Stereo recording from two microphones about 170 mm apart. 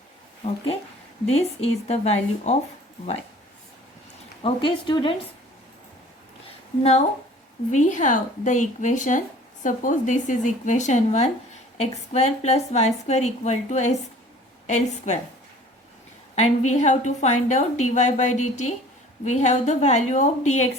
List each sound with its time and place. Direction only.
0.4 s a woman's voice: 35° left (ahead or behind)
4.4 s speech: 30° left (ahead or behind)
7.7 s a woman's voice: 45° left (ahead or behind)
16.3 s a woman's voice: 40° left (ahead or behind)